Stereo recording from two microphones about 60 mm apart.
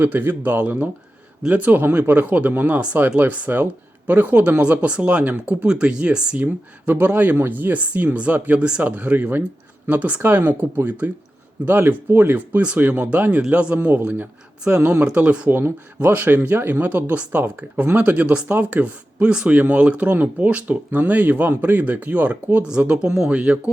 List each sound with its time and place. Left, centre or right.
0.0 s speech: right
11.6 s speech: right
12.9 s speech: right
15.4 s speech: right
23.0 s speech: centre